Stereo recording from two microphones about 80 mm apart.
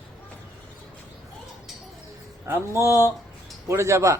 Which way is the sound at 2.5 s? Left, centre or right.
Right.